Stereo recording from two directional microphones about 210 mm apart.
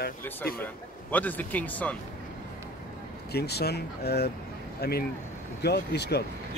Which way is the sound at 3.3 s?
50° left (ahead or behind).